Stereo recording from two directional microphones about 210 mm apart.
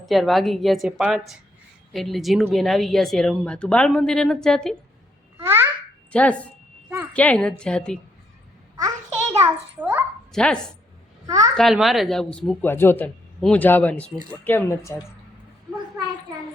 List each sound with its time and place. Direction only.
0.0 s a woman's voice: centre (ahead or behind)
5.4 s babbling: 10° right (ahead or behind)
6.1 s a woman's voice: 5° left (ahead or behind)
9.3 s a child's voice: 10° right (ahead or behind)
10.3 s a woman's voice: 5° left (ahead or behind)
11.3 s a child's voice: 15° right (ahead or behind)
11.5 s speech: centre (ahead or behind)
15.7 s a sound: 5° left (ahead or behind)